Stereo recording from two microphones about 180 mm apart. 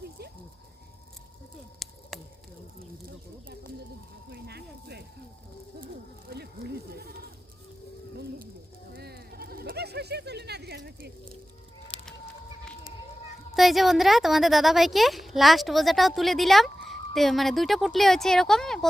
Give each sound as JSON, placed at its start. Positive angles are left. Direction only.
{"t": 1.8, "sound": "a sound", "side_deg": 0}
{"t": 4.3, "sound": "speech", "side_deg": -65}
{"t": 6.3, "sound": "speech", "side_deg": -55}
{"t": 8.9, "sound": "speech", "side_deg": -60}
{"t": 11.9, "sound": "a sound", "side_deg": 30}
{"t": 13.6, "sound": "a woman's voice", "side_deg": 0}